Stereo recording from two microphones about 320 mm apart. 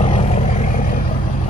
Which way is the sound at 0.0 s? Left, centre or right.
Left.